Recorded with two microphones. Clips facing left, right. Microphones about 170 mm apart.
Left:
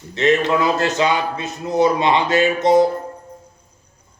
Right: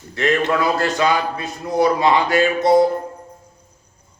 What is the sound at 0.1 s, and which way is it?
A man's voice, 20° left (ahead or behind).